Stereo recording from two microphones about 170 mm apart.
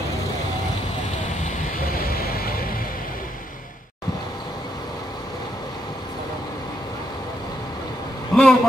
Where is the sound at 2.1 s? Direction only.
60° left (ahead or behind).